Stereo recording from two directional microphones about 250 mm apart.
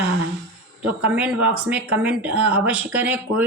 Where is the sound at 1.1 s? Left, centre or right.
Centre.